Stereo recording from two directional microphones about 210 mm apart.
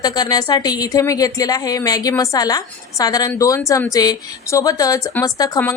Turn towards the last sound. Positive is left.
turn(degrees=15)  # may be behind; listen again after turning